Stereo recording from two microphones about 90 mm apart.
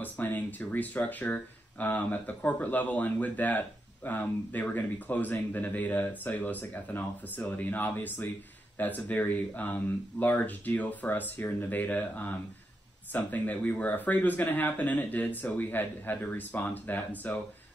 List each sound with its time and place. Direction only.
0.0 s speech: 20° left (ahead or behind)